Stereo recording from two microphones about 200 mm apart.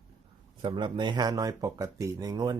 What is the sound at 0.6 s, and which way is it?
Speech, 25° right (ahead or behind).